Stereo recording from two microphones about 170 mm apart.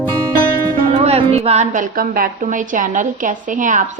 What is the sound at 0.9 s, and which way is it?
Music, 35° right (ahead or behind).